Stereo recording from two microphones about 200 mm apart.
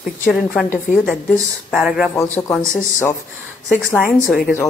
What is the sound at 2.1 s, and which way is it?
A woman's voice, 10° left (ahead or behind).